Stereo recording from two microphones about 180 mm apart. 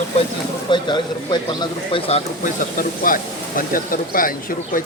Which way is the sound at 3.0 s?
50° left (ahead or behind).